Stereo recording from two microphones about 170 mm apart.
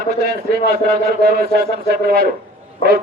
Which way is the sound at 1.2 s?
65° right (ahead or behind).